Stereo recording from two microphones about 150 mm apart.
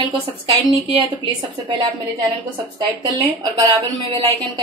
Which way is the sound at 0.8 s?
35° right (ahead or behind).